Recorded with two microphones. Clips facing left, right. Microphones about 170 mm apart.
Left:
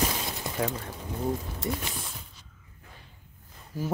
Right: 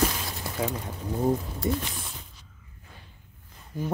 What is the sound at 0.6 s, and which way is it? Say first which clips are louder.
Speech: even; 5° right (ahead or behind).